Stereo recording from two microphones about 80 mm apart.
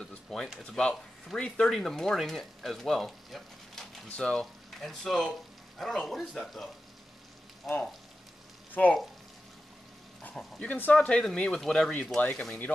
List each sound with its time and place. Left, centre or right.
0.0 s a sound: centre
0.7 s speech: centre
8.8 s speech: centre
10.2 s speech: centre
12.2 s speech: centre